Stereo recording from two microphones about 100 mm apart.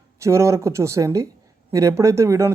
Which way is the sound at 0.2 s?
30° right (ahead or behind).